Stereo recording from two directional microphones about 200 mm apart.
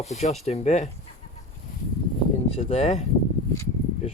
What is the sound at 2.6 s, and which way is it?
Speech, 35° left (ahead or behind).